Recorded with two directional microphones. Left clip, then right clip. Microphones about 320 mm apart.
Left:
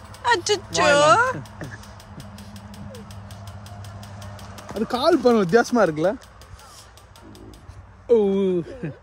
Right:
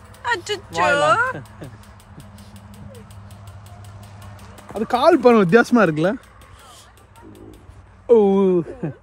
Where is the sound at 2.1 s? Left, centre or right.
Left.